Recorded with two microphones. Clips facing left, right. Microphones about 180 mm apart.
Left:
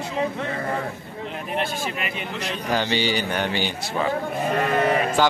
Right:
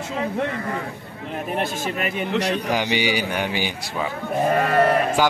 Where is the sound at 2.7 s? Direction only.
15° right (ahead or behind).